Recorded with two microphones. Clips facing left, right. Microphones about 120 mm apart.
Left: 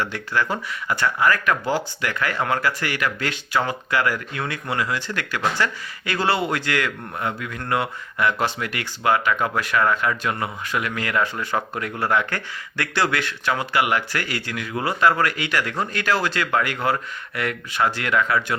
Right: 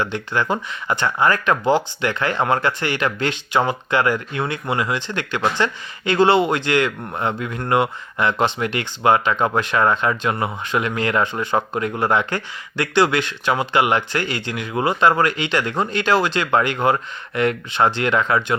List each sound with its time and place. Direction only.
0.0 s speech: 20° right (ahead or behind)